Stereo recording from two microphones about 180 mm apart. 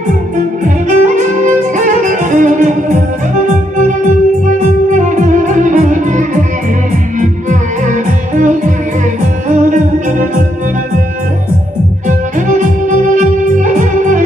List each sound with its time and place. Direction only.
0.8 s music: 45° right (ahead or behind)
4.9 s music: 45° right (ahead or behind)
8.4 s music: 45° right (ahead or behind)
12.1 s music: 45° right (ahead or behind)